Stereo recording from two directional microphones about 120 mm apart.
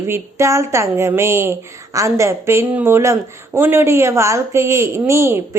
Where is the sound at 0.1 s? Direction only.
25° right (ahead or behind).